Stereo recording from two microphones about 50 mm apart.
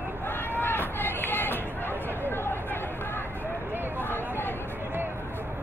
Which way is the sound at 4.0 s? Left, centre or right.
Left.